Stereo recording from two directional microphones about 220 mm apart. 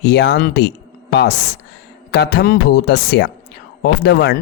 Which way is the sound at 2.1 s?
50° left (ahead or behind).